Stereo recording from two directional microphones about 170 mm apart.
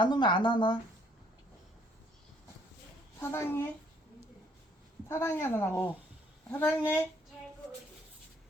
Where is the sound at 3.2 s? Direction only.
15° left (ahead or behind).